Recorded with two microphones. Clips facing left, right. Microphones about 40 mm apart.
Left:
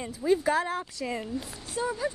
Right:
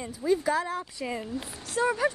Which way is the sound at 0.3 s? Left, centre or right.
Left.